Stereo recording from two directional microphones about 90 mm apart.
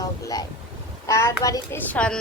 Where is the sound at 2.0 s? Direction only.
10° left (ahead or behind).